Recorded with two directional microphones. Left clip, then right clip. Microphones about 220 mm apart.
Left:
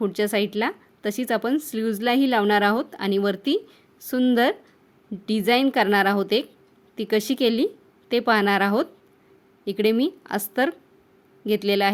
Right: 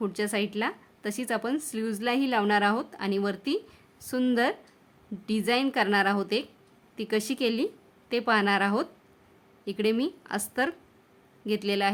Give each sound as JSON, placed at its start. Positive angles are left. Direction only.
{"t": 0.0, "sound": "a woman's voice", "side_deg": 20}